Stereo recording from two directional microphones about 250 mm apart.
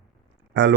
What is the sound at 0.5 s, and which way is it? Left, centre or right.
Speech, right.